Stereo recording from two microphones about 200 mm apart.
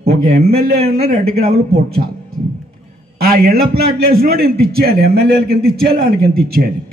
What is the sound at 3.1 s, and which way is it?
A man's voice, 50° right (ahead or behind).